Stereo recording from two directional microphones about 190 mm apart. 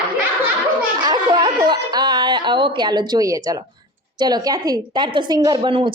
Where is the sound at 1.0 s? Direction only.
20° right (ahead or behind).